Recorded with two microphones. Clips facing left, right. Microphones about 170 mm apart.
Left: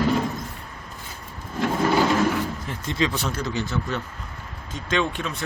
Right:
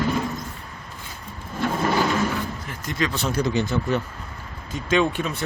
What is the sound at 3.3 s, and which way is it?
Speech, 15° right (ahead or behind).